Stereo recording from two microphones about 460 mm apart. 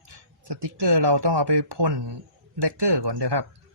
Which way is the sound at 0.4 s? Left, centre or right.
Right.